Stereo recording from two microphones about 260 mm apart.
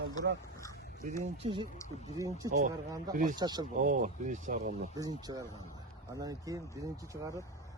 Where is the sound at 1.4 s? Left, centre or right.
Centre.